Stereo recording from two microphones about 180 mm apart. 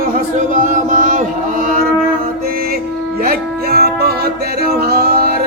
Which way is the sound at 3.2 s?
55° right (ahead or behind).